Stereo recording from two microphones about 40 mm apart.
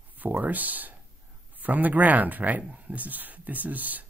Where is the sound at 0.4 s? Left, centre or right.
Right.